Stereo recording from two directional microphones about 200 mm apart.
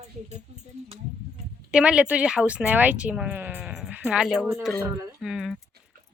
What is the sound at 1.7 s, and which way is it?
Speech, 5° right (ahead or behind).